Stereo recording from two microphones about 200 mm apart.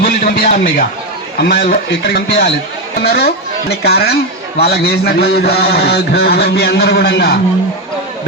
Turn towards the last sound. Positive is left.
turn(degrees=55)  # may be behind; listen again after turning